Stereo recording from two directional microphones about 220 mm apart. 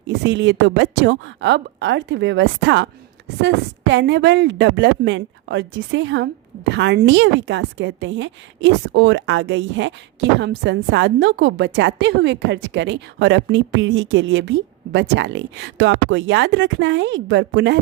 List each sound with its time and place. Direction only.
0.1 s a woman's voice: 50° right (ahead or behind)